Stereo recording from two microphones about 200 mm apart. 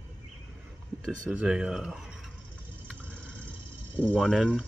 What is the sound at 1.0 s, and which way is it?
Speech, 5° right (ahead or behind).